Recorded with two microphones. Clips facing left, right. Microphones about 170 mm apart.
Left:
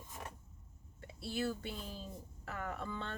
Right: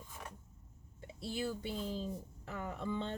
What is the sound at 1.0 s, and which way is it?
Speech, 15° right (ahead or behind).